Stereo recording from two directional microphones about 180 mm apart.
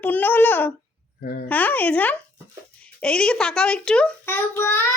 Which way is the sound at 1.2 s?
55° left (ahead or behind).